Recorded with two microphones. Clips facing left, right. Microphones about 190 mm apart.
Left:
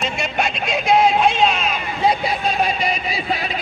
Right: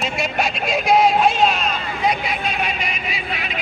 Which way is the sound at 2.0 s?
35° left (ahead or behind).